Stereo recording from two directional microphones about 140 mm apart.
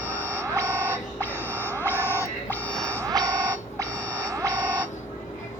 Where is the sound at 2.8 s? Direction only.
25° right (ahead or behind).